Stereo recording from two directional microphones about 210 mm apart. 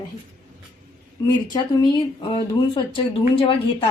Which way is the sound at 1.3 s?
20° left (ahead or behind).